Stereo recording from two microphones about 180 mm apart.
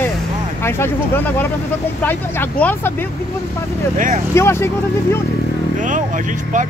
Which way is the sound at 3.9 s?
45° right (ahead or behind).